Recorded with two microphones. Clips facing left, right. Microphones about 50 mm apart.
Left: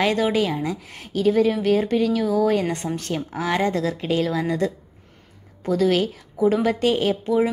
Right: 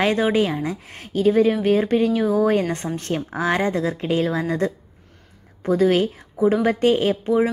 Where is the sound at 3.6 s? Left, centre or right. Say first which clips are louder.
Even; centre.